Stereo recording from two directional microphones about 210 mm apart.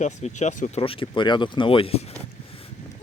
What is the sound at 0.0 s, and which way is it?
Speech, 35° left (ahead or behind).